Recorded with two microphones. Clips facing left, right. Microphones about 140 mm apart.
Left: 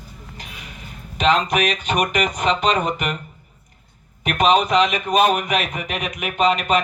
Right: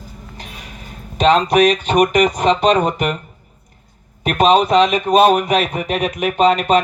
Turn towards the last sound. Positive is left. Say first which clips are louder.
# right 5 dB
turn(degrees=-35)  # may be behind; listen again after turning